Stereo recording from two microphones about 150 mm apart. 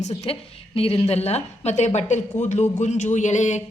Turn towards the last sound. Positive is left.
turn(degrees=50)  # may be behind; listen again after turning